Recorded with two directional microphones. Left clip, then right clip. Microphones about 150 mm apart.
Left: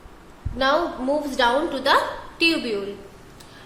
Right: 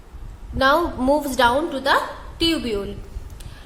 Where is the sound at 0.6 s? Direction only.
35° right (ahead or behind).